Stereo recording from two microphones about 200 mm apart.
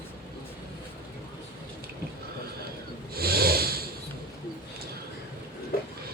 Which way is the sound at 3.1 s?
50° right (ahead or behind).